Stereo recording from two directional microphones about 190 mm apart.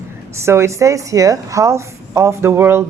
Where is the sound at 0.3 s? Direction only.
15° right (ahead or behind).